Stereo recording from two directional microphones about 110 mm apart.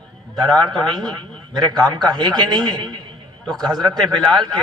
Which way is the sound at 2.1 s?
40° right (ahead or behind).